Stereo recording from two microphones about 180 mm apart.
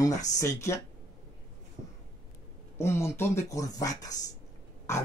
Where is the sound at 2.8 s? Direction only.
15° left (ahead or behind).